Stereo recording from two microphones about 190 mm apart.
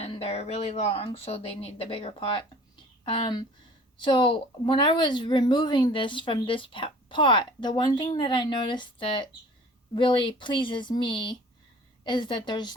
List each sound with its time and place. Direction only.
0.0 s a woman's voice: 35° left (ahead or behind)